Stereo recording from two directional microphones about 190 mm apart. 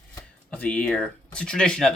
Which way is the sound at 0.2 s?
10° left (ahead or behind).